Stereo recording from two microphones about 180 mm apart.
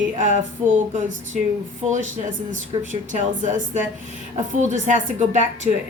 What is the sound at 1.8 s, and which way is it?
A woman's voice, 40° right (ahead or behind).